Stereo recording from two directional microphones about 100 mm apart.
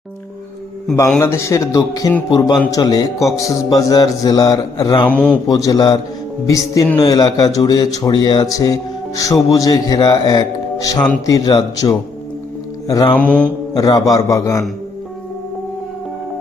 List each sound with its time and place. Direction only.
1.2 s a man's voice: 30° left (ahead or behind)
5.0 s speech: 10° left (ahead or behind)
5.5 s speech: 35° left (ahead or behind)
13.1 s speech: 15° left (ahead or behind)
13.7 s speech: 40° left (ahead or behind)